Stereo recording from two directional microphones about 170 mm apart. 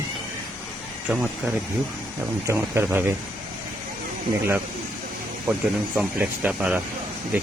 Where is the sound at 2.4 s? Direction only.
15° right (ahead or behind).